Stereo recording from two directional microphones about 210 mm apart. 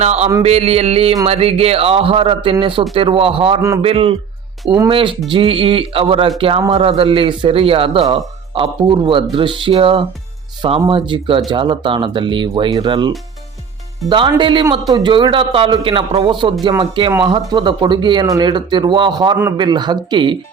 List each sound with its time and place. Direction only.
0.0 s mantra: 30° right (ahead or behind)
0.4 s a man's voice: 30° right (ahead or behind)